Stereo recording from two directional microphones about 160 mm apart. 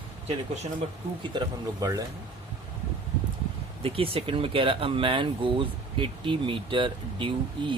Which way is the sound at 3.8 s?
35° right (ahead or behind).